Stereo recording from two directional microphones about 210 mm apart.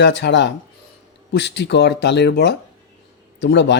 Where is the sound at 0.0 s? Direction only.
55° left (ahead or behind).